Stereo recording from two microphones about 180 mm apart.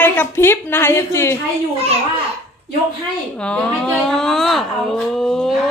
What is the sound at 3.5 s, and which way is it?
Speech, 5° left (ahead or behind).